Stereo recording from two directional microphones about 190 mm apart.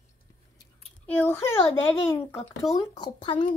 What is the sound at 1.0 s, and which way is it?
A child's voice, 10° left (ahead or behind).